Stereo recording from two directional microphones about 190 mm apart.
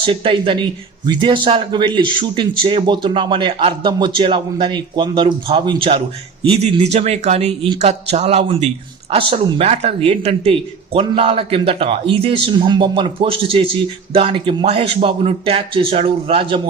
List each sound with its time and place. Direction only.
0.0 s speech: 25° right (ahead or behind)